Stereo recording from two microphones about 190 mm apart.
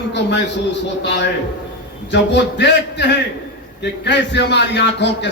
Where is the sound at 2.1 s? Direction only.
65° left (ahead or behind).